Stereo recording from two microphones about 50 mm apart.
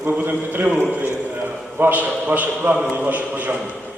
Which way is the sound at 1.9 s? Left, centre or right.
Right.